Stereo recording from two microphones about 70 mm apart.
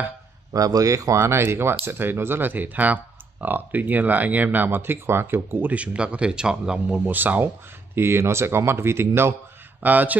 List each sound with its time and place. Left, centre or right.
0.5 s a man's voice: right
1.2 s speech: right
5.7 s speech: centre
7.1 s speech: right
7.9 s speech: right
9.8 s a man's voice: right